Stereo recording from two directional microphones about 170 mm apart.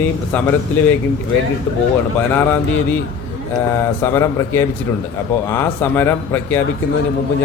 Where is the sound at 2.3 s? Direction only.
10° left (ahead or behind).